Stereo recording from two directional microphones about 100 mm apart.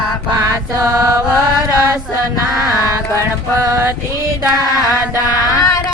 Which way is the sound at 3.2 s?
30° right (ahead or behind).